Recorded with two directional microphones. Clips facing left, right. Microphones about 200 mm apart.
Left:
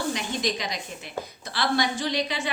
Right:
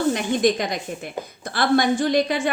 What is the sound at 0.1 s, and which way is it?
Speech, 55° right (ahead or behind).